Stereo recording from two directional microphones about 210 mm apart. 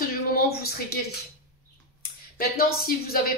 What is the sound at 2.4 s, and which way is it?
Speech, 45° left (ahead or behind).